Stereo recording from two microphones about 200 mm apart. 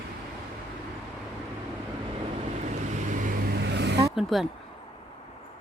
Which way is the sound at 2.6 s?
40° right (ahead or behind).